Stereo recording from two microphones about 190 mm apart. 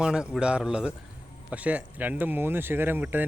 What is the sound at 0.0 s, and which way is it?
Speech, 5° right (ahead or behind).